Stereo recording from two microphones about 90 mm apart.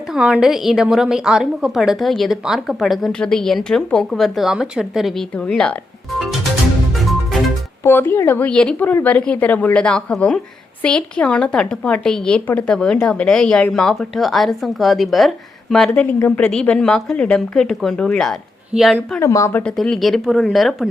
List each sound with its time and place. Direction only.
0.1 s a woman's voice: 5° right (ahead or behind)
5.4 s a woman's voice: 10° left (ahead or behind)
7.9 s a woman's voice: 25° left (ahead or behind); by 16.0 s 5° left (ahead or behind)
16.2 s a woman's voice: 20° left (ahead or behind)
16.5 s a woman's voice: 10° left (ahead or behind)
19.2 s speech: 35° left (ahead or behind)
19.7 s a woman's voice: 5° left (ahead or behind)